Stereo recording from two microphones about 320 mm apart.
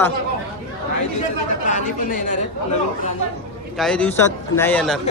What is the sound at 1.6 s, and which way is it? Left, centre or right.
Speech, left.